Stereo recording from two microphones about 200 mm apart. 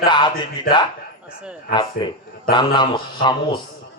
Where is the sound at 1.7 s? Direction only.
25° left (ahead or behind).